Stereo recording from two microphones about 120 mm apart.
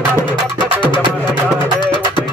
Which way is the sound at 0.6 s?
40° left (ahead or behind).